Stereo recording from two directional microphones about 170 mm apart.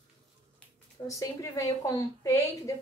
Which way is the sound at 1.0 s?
20° left (ahead or behind).